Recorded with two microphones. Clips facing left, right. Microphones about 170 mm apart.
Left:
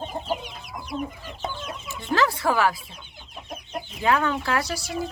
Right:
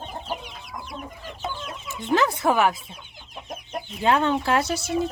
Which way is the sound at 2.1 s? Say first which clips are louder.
Right 2 dB; 20° right (ahead or behind).